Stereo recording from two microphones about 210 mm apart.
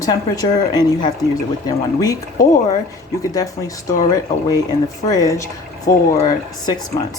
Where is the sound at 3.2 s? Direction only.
15° left (ahead or behind).